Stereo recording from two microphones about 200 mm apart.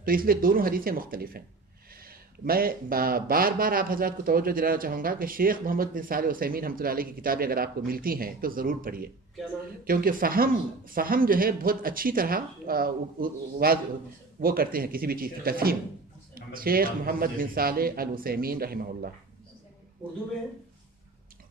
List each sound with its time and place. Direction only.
0.0 s speech: 45° right (ahead or behind)